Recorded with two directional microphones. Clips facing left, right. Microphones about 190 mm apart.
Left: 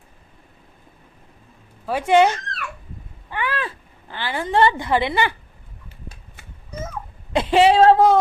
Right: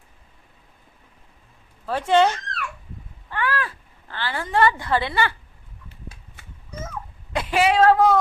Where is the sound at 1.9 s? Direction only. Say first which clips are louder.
Left 2 dB; 10° left (ahead or behind).